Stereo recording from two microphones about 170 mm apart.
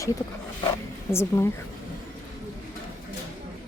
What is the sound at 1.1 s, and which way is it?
Speech, 15° left (ahead or behind).